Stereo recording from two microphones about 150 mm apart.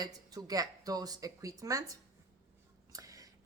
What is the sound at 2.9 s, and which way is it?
Whispering, 25° right (ahead or behind).